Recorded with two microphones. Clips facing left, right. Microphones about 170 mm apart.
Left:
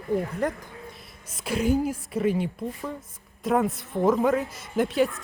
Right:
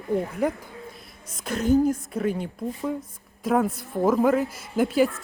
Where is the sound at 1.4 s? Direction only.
5° left (ahead or behind).